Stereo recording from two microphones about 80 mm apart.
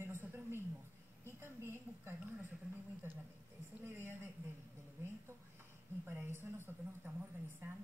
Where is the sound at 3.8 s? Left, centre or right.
Right.